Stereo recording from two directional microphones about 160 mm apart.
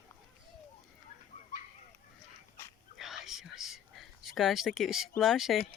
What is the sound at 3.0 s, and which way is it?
Whispering, centre (ahead or behind).